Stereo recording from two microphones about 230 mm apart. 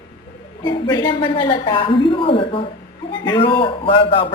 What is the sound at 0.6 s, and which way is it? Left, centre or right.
A woman's voice, centre.